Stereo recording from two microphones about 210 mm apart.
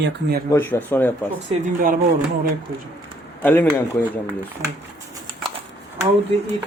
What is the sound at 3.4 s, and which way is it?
Speech, 10° left (ahead or behind).